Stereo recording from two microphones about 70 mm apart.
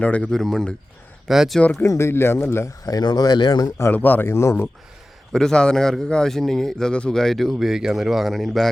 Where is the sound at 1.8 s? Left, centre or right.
Left.